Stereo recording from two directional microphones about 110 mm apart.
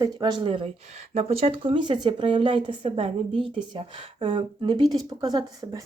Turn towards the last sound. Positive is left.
turn(degrees=-35)  # may be behind; listen again after turning